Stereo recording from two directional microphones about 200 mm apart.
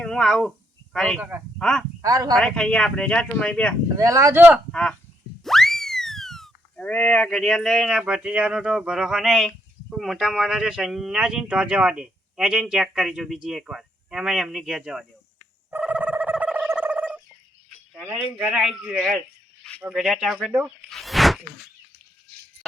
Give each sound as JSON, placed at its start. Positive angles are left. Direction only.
{"t": 0.0, "sound": "speech", "side_deg": 5}
{"t": 2.0, "sound": "speech", "side_deg": -20}
{"t": 2.3, "sound": "speech", "side_deg": 5}
{"t": 3.8, "sound": "speech", "side_deg": -15}
{"t": 15.7, "sound": "a sound", "side_deg": -5}
{"t": 18.4, "sound": "speech", "side_deg": -5}